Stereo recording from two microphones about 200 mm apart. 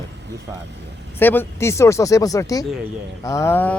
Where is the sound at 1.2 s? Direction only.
10° left (ahead or behind).